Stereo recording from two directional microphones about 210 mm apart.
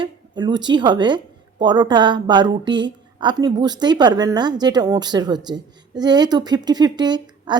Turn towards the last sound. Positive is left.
turn(degrees=-20)  # may be behind; listen again after turning